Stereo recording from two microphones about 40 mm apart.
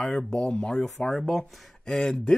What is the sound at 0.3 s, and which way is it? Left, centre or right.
Speech, left.